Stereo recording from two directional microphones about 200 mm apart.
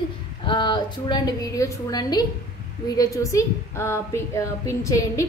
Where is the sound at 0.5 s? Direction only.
20° left (ahead or behind).